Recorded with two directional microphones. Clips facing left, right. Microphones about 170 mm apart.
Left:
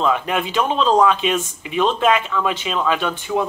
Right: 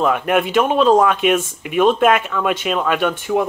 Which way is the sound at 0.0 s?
55° right (ahead or behind).